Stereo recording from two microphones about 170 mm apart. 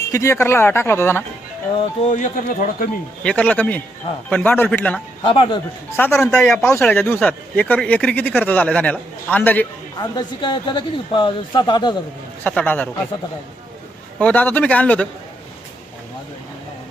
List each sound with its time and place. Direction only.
0.1 s speech: 15° left (ahead or behind)
2.0 s speech: 50° left (ahead or behind)
3.2 s speech: 10° left (ahead or behind)
5.2 s speech: 30° left (ahead or behind)
5.9 s speech: 15° left (ahead or behind)
6.5 s speech: 15° left (ahead or behind)
10.0 s speech: 25° left (ahead or behind)
12.4 s speech: 10° left (ahead or behind)
14.2 s speech: 10° left (ahead or behind)